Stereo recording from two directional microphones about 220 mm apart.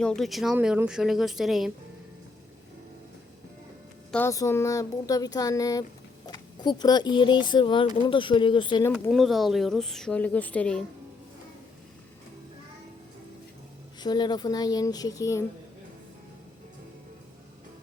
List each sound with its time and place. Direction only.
0.0 s speech: centre (ahead or behind)
4.1 s speech: 10° left (ahead or behind)
8.9 s speech: centre (ahead or behind)
14.0 s speech: 20° left (ahead or behind)